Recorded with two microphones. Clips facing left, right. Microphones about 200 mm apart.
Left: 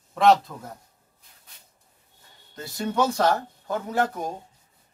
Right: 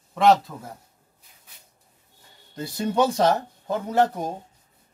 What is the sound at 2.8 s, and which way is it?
Speech, 20° right (ahead or behind).